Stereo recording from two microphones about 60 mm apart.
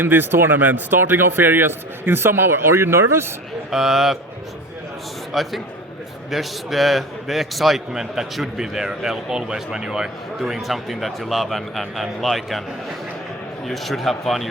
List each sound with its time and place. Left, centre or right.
0.0 s speech: right
3.7 s speech: centre
5.3 s speech: centre
13.7 s speech: centre